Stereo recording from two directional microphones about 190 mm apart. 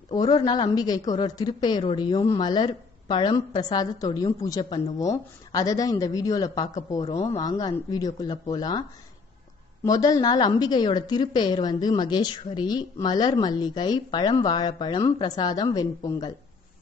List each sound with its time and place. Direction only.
0.1 s speech: 20° left (ahead or behind)
9.8 s speech: 20° left (ahead or behind)